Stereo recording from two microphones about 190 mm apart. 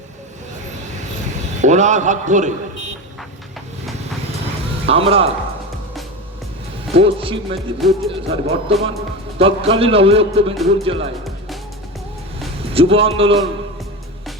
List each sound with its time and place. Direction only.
1.6 s a man's voice: 40° right (ahead or behind)
4.9 s a man's voice: 30° right (ahead or behind)
6.9 s a man's voice: 30° right (ahead or behind)
7.8 s music: centre (ahead or behind)
8.3 s a man's voice: 30° right (ahead or behind)
12.7 s a man's voice: 30° right (ahead or behind)